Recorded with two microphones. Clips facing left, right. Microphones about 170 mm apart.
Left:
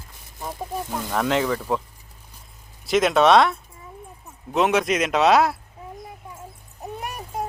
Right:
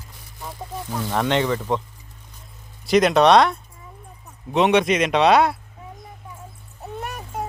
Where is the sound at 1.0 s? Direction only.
Centre (ahead or behind).